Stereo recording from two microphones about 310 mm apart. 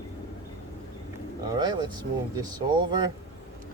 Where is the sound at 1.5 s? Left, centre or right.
Centre.